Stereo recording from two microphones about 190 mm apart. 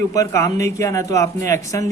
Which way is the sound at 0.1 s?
15° left (ahead or behind).